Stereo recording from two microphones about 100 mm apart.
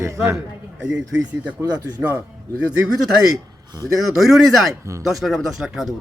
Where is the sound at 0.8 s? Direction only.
10° right (ahead or behind).